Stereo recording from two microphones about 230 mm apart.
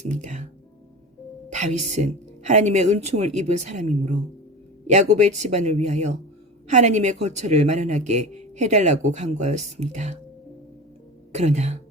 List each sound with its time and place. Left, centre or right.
0.1 s speech: right
1.5 s music: right
1.9 s speech: right
11.3 s speech: right